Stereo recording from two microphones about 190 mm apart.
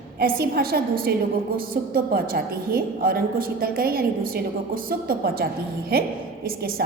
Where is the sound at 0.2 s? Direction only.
55° right (ahead or behind).